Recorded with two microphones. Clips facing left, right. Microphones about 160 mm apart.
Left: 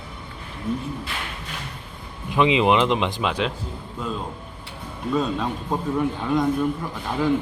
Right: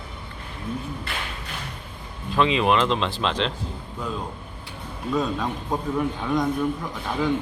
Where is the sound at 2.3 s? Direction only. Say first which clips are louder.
Left 2 dB; 15° left (ahead or behind).